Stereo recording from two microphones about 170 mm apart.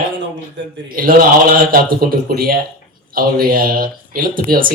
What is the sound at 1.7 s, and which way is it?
A man's voice, 60° right (ahead or behind).